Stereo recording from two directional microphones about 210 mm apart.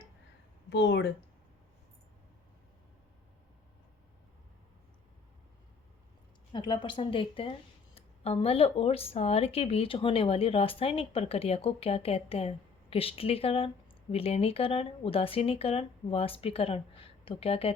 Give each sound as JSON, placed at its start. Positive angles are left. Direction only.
{"t": 0.7, "sound": "speech", "side_deg": 55}
{"t": 6.5, "sound": "speech", "side_deg": 20}